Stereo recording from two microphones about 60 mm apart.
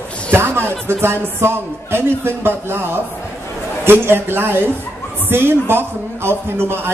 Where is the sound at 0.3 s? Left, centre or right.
Right.